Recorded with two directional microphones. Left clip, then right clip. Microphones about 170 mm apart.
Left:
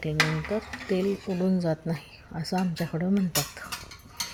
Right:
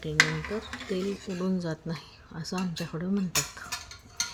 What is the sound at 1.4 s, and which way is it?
A woman's voice, 20° left (ahead or behind).